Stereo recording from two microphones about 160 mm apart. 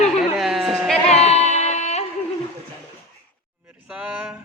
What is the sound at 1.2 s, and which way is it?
Music, 40° left (ahead or behind).